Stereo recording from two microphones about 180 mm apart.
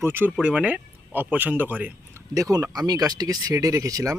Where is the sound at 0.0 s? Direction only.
10° right (ahead or behind).